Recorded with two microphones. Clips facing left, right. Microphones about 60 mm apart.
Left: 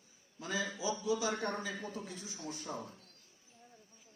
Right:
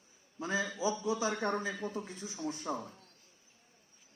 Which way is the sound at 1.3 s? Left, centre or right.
Right.